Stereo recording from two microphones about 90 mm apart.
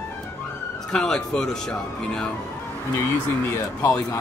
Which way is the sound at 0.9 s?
5° left (ahead or behind).